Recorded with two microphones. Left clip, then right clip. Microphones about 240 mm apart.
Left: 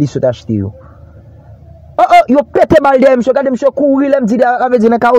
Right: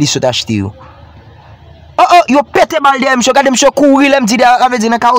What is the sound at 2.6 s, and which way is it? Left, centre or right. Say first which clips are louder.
Speech: left 3 dB; centre.